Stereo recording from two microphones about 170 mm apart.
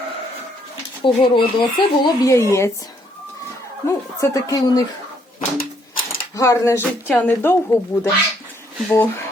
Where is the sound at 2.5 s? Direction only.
15° left (ahead or behind).